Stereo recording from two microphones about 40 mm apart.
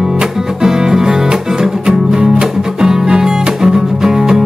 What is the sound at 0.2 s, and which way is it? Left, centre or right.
Music, centre.